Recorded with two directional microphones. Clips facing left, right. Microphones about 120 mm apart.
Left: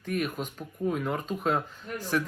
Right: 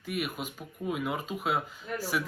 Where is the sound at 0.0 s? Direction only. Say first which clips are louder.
Left 3 dB; 10° right (ahead or behind).